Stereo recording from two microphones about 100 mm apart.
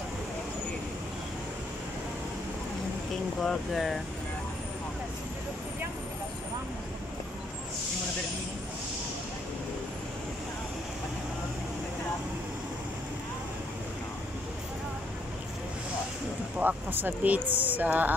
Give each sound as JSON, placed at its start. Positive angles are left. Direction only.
{"t": 3.3, "sound": "speech", "side_deg": 0}
{"t": 16.5, "sound": "speech", "side_deg": -20}